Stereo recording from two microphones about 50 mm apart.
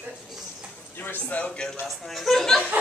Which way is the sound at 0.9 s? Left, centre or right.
Left.